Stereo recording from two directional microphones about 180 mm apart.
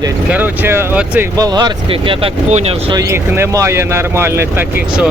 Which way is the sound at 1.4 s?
20° right (ahead or behind).